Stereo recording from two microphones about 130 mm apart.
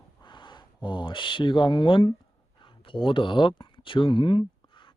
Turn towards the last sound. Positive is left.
turn(degrees=40)  # may be behind; listen again after turning